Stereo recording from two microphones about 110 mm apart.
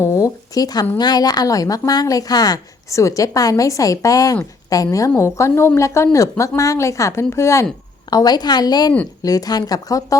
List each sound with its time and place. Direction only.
0.0 s a woman's voice: 30° left (ahead or behind)
8.1 s speech: 40° left (ahead or behind)